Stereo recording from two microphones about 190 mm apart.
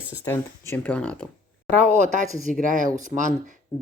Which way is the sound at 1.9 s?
40° right (ahead or behind).